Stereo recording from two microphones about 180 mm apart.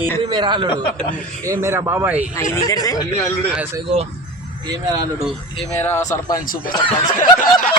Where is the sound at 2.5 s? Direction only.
20° left (ahead or behind).